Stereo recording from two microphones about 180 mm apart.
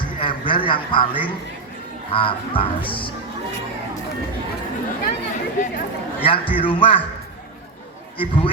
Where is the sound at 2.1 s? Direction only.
30° left (ahead or behind).